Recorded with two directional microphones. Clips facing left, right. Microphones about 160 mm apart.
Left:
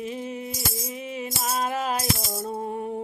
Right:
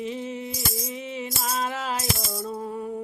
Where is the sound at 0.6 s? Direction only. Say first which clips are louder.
Right 1 dB; 30° left (ahead or behind).